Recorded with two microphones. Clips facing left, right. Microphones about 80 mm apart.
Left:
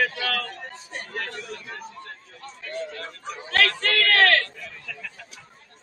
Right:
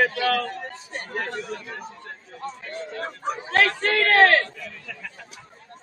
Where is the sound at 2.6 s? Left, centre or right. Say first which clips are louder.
Left 2 dB; right.